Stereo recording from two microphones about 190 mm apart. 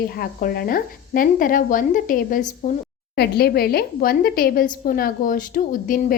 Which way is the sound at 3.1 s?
55° left (ahead or behind).